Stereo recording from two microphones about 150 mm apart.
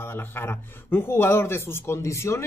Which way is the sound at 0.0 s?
15° left (ahead or behind).